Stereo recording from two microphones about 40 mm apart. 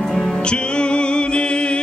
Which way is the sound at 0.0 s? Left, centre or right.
Centre.